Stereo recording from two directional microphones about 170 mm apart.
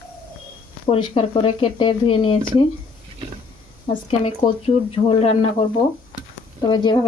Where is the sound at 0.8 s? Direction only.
30° left (ahead or behind).